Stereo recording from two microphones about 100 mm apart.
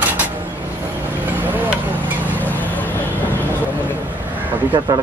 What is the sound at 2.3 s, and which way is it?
Vehicle, 15° left (ahead or behind).